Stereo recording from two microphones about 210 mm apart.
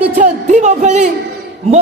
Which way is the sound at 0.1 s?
35° right (ahead or behind).